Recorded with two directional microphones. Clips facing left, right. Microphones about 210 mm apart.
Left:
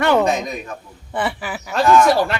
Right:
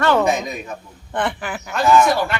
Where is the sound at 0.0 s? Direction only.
15° left (ahead or behind).